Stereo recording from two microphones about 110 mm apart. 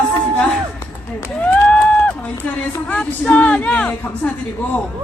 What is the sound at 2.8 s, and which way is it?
Speech, 10° left (ahead or behind).